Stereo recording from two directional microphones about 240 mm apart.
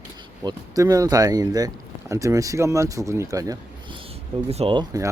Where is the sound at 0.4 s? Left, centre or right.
Centre.